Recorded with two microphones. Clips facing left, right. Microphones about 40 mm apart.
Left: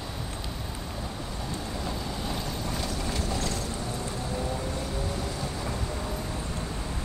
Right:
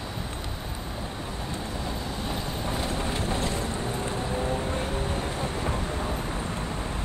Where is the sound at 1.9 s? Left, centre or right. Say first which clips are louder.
Even; right.